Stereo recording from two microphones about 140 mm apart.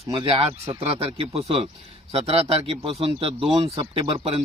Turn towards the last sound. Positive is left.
turn(degrees=-40)  # may be behind; listen again after turning